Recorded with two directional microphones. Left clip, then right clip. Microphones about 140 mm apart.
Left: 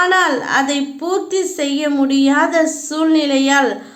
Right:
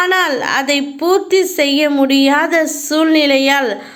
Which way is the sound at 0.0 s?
25° right (ahead or behind).